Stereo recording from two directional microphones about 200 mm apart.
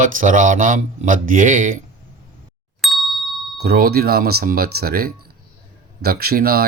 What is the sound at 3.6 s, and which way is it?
Speech, 50° right (ahead or behind).